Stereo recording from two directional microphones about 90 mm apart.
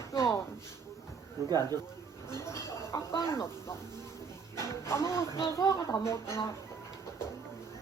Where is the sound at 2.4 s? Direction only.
35° left (ahead or behind).